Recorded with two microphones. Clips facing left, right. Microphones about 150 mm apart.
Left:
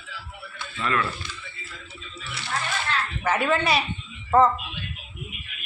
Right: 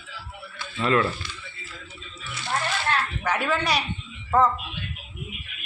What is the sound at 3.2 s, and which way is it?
Speech, centre (ahead or behind).